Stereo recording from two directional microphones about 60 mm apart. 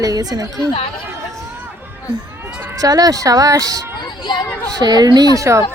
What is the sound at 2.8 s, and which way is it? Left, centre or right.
Speech, right.